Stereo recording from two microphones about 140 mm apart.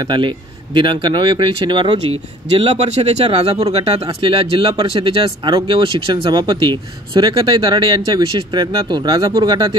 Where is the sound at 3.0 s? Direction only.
45° right (ahead or behind).